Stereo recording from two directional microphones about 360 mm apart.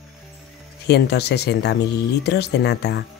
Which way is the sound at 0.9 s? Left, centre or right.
Left.